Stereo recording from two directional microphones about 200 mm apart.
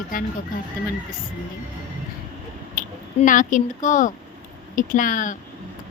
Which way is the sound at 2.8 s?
40° left (ahead or behind).